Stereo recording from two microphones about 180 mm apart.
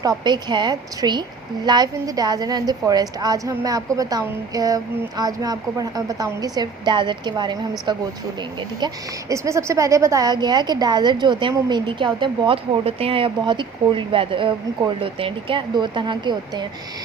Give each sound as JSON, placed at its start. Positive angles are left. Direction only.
{"t": 0.0, "sound": "a woman's voice", "side_deg": -20}
{"t": 9.3, "sound": "a woman's voice", "side_deg": -15}